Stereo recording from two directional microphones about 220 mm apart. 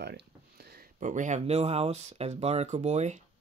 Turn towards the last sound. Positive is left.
turn(degrees=-30)  # may be behind; listen again after turning